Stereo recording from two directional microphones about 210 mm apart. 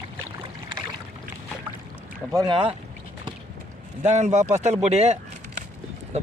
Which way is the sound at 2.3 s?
20° right (ahead or behind).